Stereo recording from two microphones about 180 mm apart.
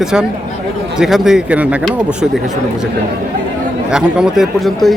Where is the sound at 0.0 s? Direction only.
5° right (ahead or behind).